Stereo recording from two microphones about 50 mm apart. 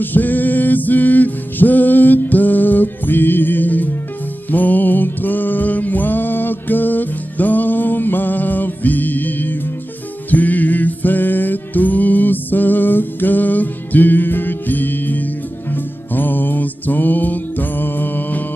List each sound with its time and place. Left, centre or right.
0.0 s music: left